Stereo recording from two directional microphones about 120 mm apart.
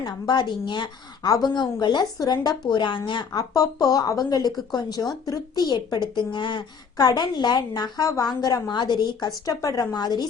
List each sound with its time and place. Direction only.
0.0 s a woman's voice: 40° left (ahead or behind)